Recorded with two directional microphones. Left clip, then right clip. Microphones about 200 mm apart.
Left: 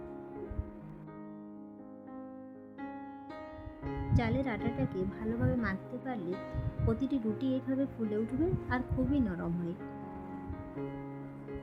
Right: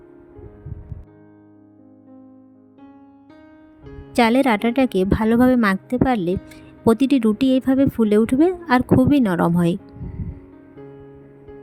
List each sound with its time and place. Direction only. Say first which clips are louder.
4.1 s a woman's voice: right 19 dB; 55° right (ahead or behind)